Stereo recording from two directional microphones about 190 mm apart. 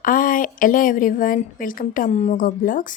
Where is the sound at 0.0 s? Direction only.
45° left (ahead or behind).